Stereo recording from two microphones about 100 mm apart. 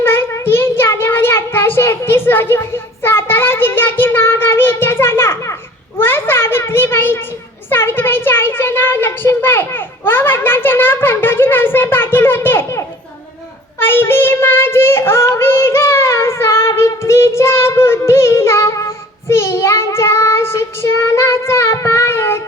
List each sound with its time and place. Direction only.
0.0 s child singing: 25° left (ahead or behind)
6.0 s a sound: 25° left (ahead or behind)
13.7 s child singing: 20° left (ahead or behind)